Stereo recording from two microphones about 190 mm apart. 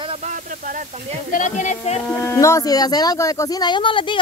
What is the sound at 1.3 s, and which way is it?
Speech, 40° left (ahead or behind).